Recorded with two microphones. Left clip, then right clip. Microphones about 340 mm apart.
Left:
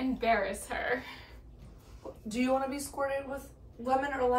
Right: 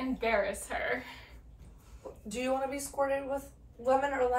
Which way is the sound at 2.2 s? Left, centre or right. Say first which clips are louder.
Left 2 dB; centre.